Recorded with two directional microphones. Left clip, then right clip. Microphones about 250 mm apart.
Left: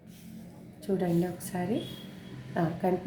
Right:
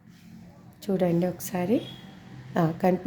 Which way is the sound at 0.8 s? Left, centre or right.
Right.